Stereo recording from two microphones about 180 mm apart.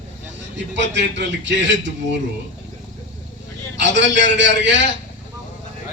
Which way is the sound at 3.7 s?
80° right.